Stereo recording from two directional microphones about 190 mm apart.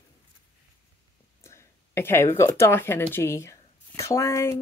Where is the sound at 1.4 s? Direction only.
15° left (ahead or behind).